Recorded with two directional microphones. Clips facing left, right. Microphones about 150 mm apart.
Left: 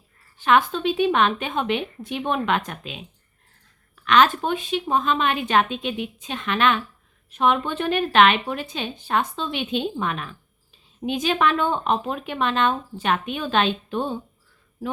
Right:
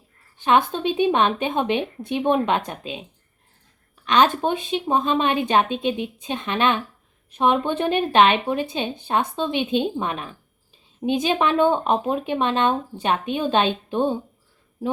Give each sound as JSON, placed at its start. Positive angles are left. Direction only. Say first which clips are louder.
{"t": 0.4, "sound": "a woman's voice", "louder": "even", "side_deg": -25}